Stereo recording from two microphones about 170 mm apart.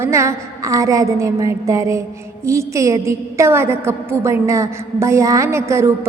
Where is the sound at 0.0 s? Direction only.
15° right (ahead or behind).